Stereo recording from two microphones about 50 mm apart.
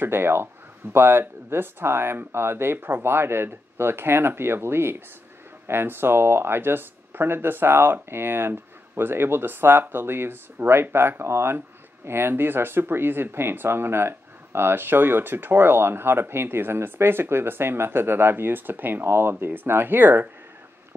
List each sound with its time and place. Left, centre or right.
0.0 s speech: right